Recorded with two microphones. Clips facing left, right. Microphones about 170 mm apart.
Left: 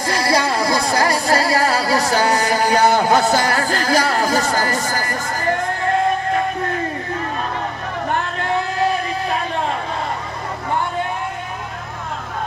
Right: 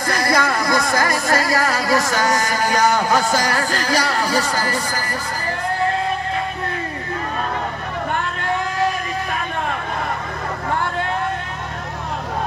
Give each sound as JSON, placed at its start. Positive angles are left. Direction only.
{"t": 0.3, "sound": "speech", "side_deg": 30}